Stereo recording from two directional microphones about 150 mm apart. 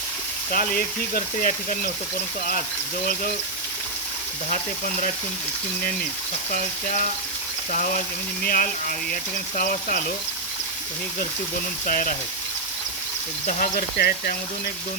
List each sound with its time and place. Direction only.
0.5 s speech: 70° left (ahead or behind)
4.4 s speech: 55° left (ahead or behind)
6.5 s speech: 65° left (ahead or behind)
11.9 s speech: 65° left (ahead or behind)
13.5 s speech: 70° left (ahead or behind); by 14.3 s 90° left